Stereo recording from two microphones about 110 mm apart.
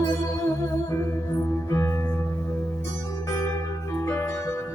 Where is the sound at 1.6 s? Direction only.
30° left (ahead or behind).